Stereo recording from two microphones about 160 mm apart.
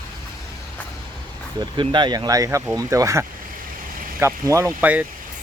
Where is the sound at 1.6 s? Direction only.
30° right (ahead or behind).